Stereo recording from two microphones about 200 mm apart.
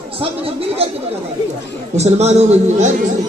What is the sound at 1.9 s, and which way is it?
A man's voice, 35° right (ahead or behind).